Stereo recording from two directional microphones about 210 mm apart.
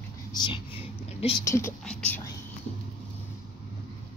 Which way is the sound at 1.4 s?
15° left (ahead or behind).